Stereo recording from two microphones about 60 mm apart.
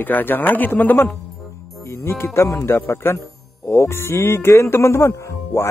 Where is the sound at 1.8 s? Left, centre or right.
Left.